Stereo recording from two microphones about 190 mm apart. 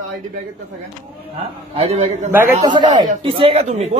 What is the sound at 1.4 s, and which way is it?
Speech, 30° right (ahead or behind).